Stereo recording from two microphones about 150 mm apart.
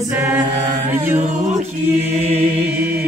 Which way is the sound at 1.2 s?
50° right (ahead or behind).